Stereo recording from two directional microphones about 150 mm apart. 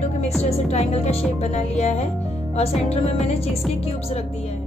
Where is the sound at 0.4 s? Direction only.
45° left (ahead or behind).